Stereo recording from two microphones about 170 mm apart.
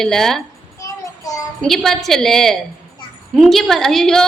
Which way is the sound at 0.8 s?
20° left (ahead or behind).